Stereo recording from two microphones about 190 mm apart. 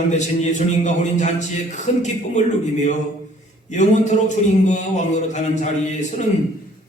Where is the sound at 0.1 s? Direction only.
40° left (ahead or behind).